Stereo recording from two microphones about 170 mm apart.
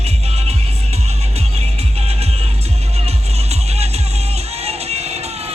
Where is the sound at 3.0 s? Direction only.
40° right (ahead or behind).